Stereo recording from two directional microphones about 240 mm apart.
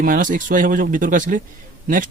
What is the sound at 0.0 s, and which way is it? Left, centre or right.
Speech, right.